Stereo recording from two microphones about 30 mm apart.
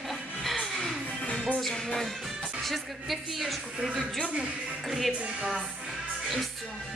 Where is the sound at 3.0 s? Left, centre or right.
Centre.